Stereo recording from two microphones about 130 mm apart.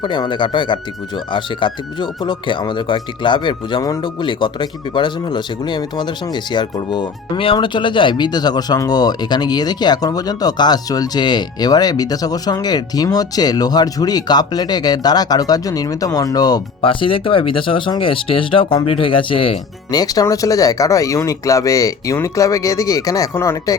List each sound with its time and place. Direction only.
0.0 s speech: 35° left (ahead or behind)
16.8 s speech: 40° left (ahead or behind)
19.9 s speech: 30° left (ahead or behind)